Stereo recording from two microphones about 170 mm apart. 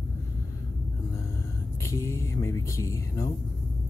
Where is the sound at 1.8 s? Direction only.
15° left (ahead or behind).